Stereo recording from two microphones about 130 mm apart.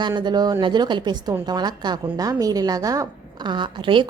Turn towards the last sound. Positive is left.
turn(degrees=-40)  # may be behind; listen again after turning